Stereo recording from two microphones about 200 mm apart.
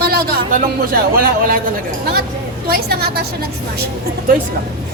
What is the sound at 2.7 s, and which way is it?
Speech, 50° right (ahead or behind).